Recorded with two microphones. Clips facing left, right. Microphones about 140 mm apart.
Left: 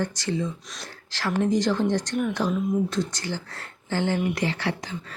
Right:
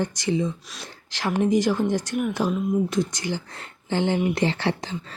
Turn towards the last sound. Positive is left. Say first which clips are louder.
# right 3 dB
turn(degrees=-30)  # may be behind; listen again after turning